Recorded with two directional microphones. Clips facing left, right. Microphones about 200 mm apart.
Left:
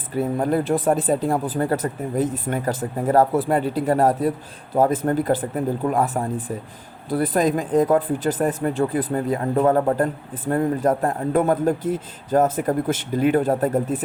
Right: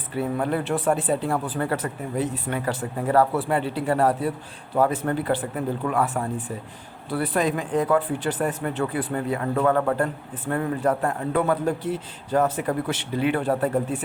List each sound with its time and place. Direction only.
0.1 s a man's voice: 40° left (ahead or behind)